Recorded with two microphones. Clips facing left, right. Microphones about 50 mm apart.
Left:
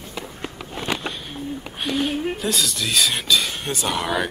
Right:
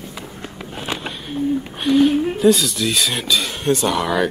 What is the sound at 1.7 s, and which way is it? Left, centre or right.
Speech, centre.